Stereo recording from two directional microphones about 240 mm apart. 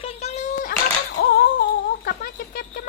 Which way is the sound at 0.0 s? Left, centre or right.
Left.